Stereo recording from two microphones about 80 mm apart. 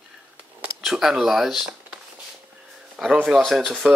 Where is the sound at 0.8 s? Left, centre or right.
Centre.